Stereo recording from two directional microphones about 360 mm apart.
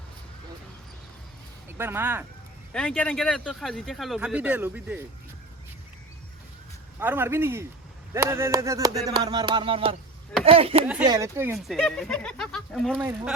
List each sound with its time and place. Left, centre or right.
1.8 s speech: centre
7.0 s speech: centre